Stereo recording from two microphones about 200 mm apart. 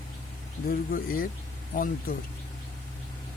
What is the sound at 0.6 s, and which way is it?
Speech, 45° left (ahead or behind).